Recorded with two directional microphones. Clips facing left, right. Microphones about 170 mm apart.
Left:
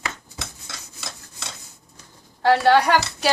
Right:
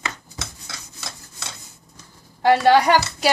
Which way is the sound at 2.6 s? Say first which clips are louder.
Right 1 dB; 15° right (ahead or behind).